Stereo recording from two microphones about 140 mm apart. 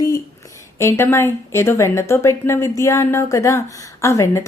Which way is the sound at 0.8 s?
20° left (ahead or behind).